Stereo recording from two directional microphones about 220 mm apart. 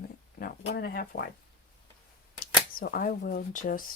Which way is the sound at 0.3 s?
45° left (ahead or behind).